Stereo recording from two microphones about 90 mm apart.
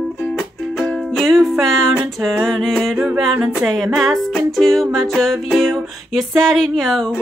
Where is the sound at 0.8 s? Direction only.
Centre (ahead or behind).